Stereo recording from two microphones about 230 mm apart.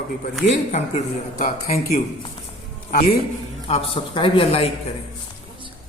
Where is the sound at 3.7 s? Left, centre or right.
Left.